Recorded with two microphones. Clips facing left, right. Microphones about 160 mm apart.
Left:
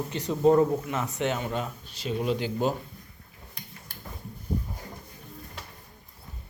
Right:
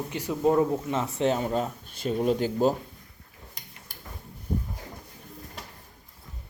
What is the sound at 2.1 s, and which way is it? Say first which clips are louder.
Speech: right 3 dB; 45° right (ahead or behind).